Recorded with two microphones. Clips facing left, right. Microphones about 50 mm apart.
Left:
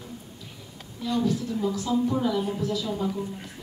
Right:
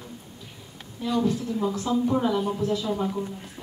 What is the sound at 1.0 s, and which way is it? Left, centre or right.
A man's voice, right.